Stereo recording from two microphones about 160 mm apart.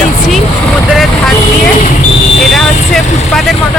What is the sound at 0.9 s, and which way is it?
Speech, centre (ahead or behind).